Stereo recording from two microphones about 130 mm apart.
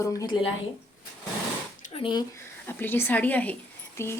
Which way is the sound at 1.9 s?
40° left (ahead or behind).